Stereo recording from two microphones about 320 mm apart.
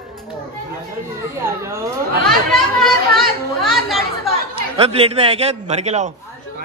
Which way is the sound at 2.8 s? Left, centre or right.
Centre.